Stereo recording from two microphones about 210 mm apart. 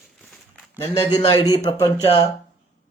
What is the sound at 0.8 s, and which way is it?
Speech, 25° left (ahead or behind).